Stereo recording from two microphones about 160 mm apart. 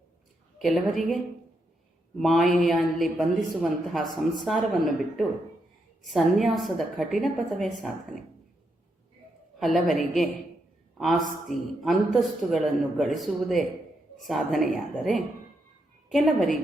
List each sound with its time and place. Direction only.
0.6 s a woman's voice: centre (ahead or behind)
9.6 s a woman's voice: centre (ahead or behind)